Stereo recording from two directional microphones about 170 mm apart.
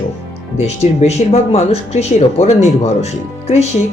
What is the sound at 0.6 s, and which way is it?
Speech, 40° left (ahead or behind).